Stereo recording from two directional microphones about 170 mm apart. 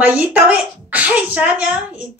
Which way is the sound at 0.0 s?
10° right (ahead or behind).